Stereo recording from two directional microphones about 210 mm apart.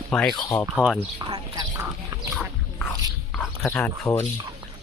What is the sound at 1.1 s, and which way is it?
Speech, 20° right (ahead or behind).